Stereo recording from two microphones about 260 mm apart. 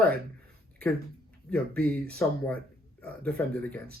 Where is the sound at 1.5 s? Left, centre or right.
Centre.